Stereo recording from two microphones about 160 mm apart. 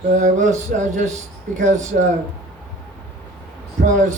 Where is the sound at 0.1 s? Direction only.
50° right (ahead or behind).